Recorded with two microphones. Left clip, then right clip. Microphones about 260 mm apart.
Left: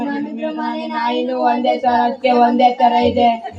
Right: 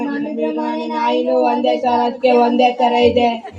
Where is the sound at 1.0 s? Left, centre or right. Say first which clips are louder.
Right 2 dB; right.